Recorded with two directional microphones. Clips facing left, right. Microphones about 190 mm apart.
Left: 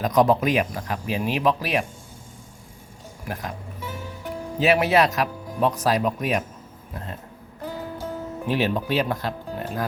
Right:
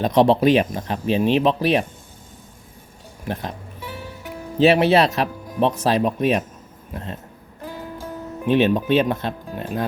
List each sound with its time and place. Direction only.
0.0 s speech: 30° right (ahead or behind)
3.2 s speech: 30° right (ahead or behind)
4.6 s speech: 30° right (ahead or behind)
8.4 s speech: 20° right (ahead or behind)